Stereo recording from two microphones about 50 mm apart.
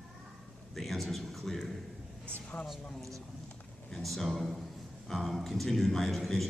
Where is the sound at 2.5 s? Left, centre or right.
Left.